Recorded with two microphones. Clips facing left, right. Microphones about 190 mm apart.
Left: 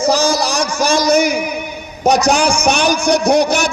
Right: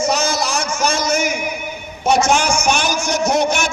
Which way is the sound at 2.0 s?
40° left (ahead or behind).